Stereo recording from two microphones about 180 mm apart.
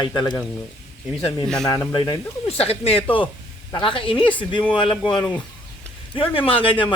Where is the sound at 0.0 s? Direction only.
25° left (ahead or behind).